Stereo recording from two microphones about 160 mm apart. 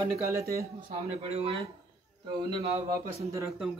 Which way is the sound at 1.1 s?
40° right (ahead or behind).